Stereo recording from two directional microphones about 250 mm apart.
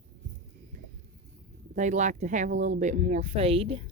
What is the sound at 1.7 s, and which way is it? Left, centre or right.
Speech, right.